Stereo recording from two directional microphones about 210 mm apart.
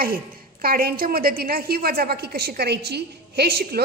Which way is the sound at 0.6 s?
45° right (ahead or behind).